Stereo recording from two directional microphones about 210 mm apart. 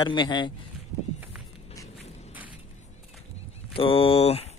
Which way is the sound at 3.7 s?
25° left (ahead or behind).